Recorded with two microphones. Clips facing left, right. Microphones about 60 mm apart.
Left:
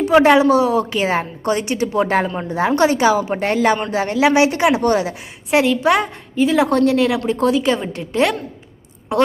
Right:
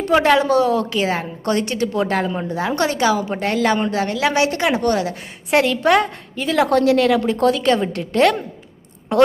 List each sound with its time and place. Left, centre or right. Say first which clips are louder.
0.0 s a woman's voice: left 3 dB; centre
5.5 s a woman's voice: left 1 dB; centre